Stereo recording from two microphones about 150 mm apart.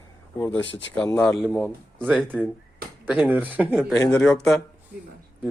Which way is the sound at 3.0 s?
10° right (ahead or behind).